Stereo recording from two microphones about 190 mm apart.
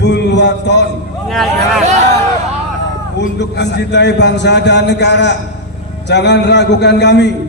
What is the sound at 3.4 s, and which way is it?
A man's voice, 65° left (ahead or behind).